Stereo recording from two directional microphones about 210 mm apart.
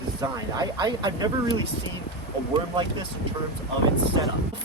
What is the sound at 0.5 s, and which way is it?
Speech, 20° right (ahead or behind).